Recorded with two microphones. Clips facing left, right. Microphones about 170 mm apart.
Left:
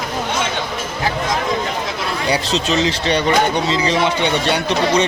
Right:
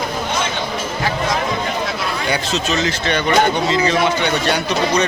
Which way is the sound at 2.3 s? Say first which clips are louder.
Left 3 dB; 30° left (ahead or behind).